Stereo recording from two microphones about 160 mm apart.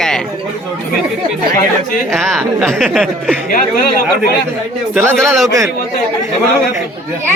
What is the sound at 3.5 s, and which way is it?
Speech, 60° left (ahead or behind).